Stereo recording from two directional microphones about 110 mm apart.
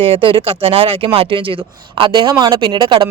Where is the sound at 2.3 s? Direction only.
35° right (ahead or behind).